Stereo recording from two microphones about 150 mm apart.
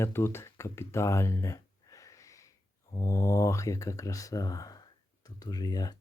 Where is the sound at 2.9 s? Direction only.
20° left (ahead or behind).